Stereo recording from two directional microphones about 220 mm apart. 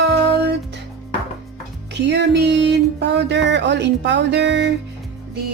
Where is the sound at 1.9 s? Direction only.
50° right (ahead or behind).